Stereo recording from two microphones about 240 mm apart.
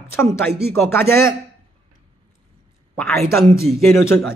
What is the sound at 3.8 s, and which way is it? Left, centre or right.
Speech, centre.